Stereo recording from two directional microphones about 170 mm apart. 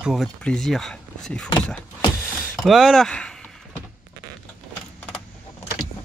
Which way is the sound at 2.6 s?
Centre (ahead or behind).